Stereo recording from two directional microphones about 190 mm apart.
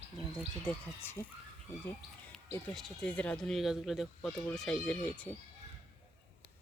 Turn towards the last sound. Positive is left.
turn(degrees=5)  # may be behind; listen again after turning